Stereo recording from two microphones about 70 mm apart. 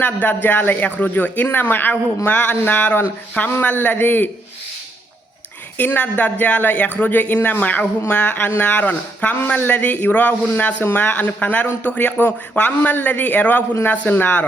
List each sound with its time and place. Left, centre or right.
0.0 s speech: left
5.7 s speech: left